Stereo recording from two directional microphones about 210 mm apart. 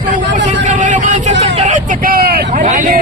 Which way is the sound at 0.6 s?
35° right (ahead or behind).